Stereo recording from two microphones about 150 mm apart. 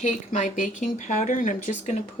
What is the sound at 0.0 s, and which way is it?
Speech, 55° left (ahead or behind).